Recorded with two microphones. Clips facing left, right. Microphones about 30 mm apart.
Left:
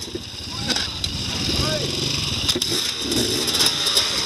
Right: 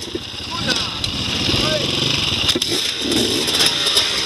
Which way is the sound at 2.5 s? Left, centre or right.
Right.